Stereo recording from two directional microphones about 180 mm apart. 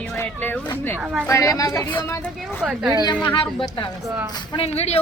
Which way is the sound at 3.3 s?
25° left (ahead or behind).